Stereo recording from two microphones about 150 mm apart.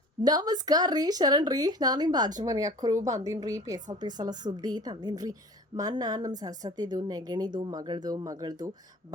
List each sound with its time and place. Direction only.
0.2 s a woman's voice: 25° right (ahead or behind)